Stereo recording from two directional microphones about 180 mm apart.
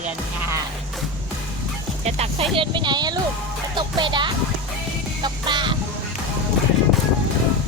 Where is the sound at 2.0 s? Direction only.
35° right (ahead or behind).